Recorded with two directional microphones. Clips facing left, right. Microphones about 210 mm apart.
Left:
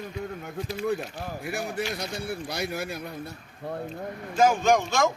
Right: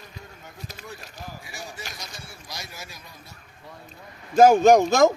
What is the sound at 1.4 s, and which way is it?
A man's voice, 60° left (ahead or behind).